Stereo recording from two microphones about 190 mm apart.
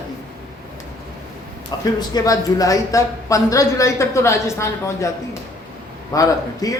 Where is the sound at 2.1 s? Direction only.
20° left (ahead or behind).